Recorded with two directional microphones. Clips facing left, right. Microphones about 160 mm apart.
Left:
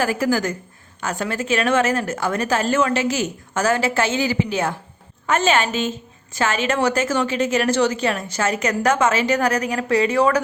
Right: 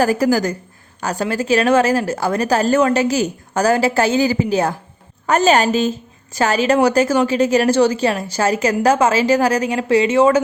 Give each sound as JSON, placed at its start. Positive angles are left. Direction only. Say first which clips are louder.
{"t": 0.0, "sound": "a woman's voice", "louder": "right 5 dB", "side_deg": -40}